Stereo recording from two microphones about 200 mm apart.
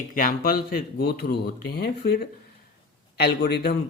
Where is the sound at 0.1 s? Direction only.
45° left (ahead or behind).